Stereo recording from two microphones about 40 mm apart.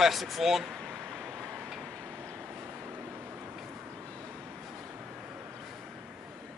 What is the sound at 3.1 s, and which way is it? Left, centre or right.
Vehicle, right.